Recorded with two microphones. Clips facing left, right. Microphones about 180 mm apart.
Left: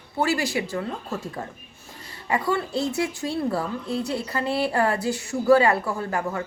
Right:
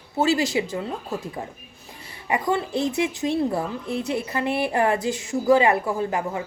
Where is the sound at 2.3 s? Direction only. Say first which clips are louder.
Right 1 dB; 20° right (ahead or behind).